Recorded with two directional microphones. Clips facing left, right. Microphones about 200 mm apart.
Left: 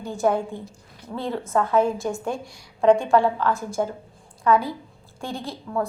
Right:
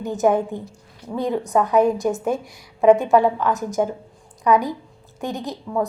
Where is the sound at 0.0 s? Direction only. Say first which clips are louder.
Right 4 dB; 20° right (ahead or behind).